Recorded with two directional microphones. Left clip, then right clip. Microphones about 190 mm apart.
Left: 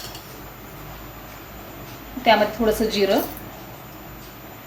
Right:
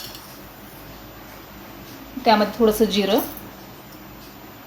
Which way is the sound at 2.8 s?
25° right (ahead or behind).